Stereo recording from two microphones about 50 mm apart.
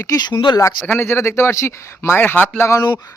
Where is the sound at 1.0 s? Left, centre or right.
Left.